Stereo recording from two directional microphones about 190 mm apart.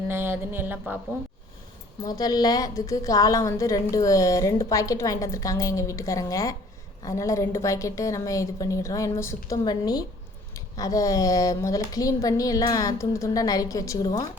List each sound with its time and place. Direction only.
0.1 s speech: 10° right (ahead or behind)
2.0 s a woman's voice: 20° left (ahead or behind)